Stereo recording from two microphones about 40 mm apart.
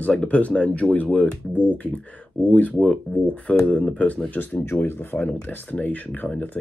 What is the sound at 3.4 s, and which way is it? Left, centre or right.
Speech, left.